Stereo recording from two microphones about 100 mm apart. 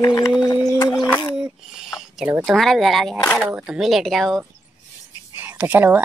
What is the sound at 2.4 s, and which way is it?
Speech, centre (ahead or behind).